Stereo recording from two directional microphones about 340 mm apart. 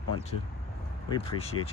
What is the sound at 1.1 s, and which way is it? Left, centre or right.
Speech, centre.